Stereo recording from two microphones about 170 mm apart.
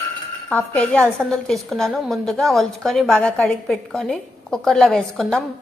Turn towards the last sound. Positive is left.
turn(degrees=5)  # may be behind; listen again after turning